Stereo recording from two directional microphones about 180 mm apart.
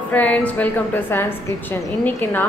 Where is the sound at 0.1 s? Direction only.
10° left (ahead or behind).